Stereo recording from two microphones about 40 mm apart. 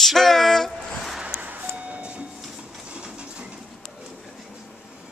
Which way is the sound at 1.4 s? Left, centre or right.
Right.